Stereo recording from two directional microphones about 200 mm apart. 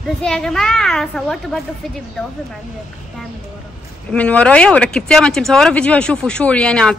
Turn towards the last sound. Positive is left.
turn(degrees=5)  # may be behind; listen again after turning